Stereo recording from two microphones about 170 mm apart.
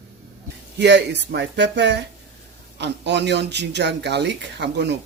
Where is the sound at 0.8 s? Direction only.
90° right.